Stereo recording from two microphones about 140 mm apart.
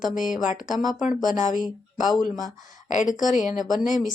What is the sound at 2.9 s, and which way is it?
Speech, 65° left (ahead or behind).